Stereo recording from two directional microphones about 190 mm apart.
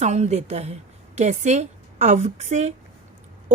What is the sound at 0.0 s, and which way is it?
A woman's voice, 35° right (ahead or behind).